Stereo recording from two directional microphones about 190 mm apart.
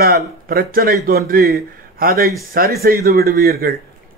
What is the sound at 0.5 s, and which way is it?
A man's voice, 50° right (ahead or behind).